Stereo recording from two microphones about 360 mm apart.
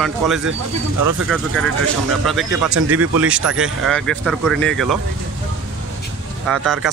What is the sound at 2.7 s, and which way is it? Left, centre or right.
Speech, right.